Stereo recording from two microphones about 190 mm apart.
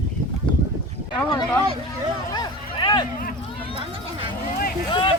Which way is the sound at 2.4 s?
20° left (ahead or behind).